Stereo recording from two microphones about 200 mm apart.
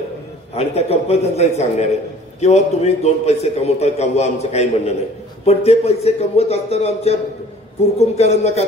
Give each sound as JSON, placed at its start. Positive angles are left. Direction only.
{"t": 0.6, "sound": "a man's voice", "side_deg": 30}